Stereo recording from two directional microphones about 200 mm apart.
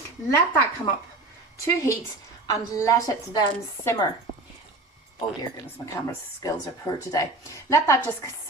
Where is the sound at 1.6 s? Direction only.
15° left (ahead or behind).